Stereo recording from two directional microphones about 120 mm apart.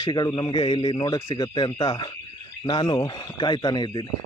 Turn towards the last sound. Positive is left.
turn(degrees=35)  # may be behind; listen again after turning